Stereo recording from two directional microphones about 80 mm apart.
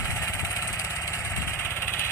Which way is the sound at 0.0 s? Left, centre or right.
Left.